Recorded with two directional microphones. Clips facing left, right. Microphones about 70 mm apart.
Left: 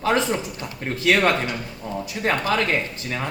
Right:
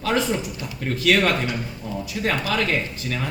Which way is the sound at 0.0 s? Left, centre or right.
Left.